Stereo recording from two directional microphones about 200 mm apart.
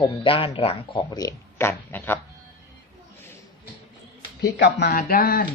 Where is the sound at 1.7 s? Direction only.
10° left (ahead or behind).